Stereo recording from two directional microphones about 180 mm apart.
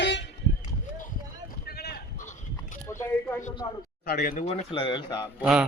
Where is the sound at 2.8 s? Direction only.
15° left (ahead or behind).